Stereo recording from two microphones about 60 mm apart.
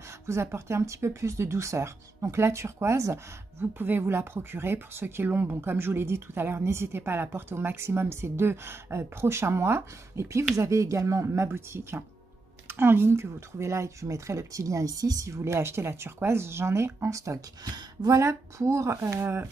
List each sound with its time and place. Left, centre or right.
0.3 s speech: right
10.5 s speech: right
11.4 s speech: right
15.2 s speech: right